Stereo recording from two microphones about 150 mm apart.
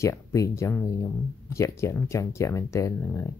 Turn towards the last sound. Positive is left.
turn(degrees=20)  # may be behind; listen again after turning